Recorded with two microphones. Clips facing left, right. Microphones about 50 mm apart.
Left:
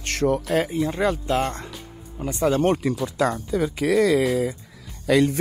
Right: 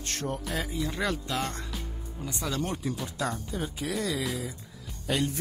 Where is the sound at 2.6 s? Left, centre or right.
Left.